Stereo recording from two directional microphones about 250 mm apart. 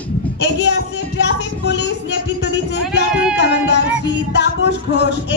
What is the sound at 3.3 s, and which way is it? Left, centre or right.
Music, left.